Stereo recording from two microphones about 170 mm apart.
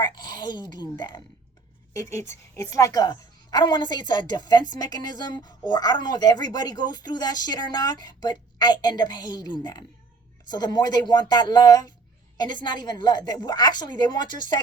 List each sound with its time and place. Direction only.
0.0 s speech: 25° left (ahead or behind)
2.2 s a woman's voice: 15° left (ahead or behind)